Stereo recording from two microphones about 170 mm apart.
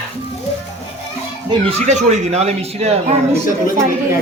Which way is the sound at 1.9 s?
40° right (ahead or behind).